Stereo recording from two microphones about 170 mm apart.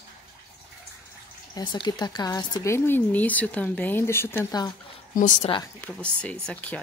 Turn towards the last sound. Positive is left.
turn(degrees=5)  # may be behind; listen again after turning